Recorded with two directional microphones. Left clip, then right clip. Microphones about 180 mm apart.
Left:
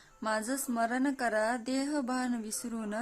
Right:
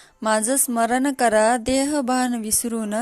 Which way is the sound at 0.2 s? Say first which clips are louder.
Right 12 dB; 40° right (ahead or behind).